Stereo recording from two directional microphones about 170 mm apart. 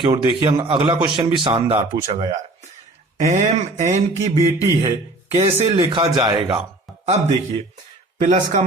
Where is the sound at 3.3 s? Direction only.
45° right (ahead or behind).